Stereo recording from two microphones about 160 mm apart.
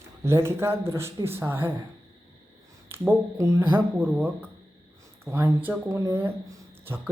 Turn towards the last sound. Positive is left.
turn(degrees=-15)  # may be behind; listen again after turning